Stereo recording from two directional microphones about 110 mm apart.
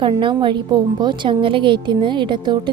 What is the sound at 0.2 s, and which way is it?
Speech, 50° right (ahead or behind).